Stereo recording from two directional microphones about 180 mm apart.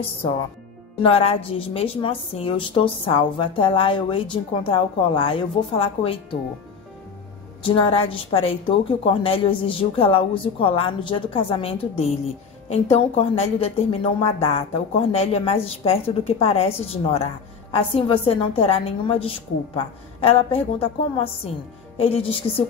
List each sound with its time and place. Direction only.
1.0 s a woman's voice: 30° left (ahead or behind)
7.6 s a woman's voice: 30° left (ahead or behind)